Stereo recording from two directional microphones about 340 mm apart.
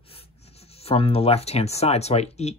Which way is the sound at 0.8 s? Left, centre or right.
Centre.